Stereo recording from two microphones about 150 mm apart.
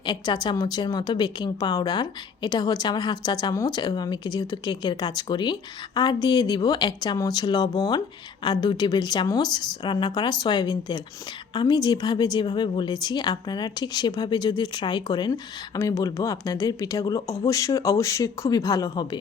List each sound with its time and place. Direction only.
0.0 s a woman's voice: 30° left (ahead or behind)